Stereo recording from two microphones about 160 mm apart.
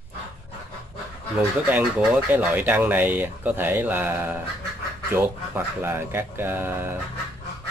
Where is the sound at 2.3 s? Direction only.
10° right (ahead or behind).